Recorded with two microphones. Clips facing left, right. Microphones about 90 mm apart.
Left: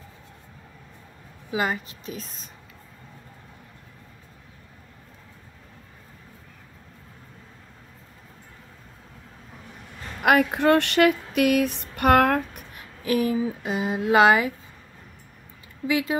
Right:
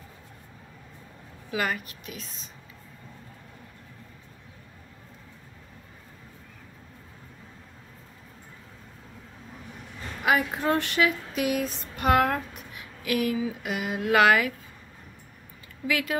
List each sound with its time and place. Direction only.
1.5 s speech: 25° left (ahead or behind)
2.1 s speech: 45° left (ahead or behind)
10.2 s female singing: 65° left (ahead or behind)
13.0 s speech: 30° left (ahead or behind)
15.9 s speech: 20° left (ahead or behind)